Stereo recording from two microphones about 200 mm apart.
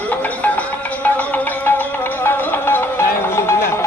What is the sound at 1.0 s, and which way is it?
Music, 10° left (ahead or behind).